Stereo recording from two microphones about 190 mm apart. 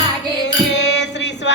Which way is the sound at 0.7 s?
65° left (ahead or behind).